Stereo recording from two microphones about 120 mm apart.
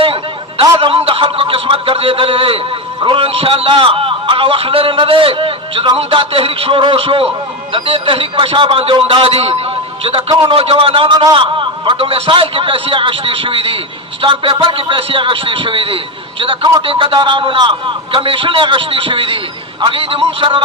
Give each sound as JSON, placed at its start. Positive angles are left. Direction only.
{"t": 0.0, "sound": "a man's voice", "side_deg": -50}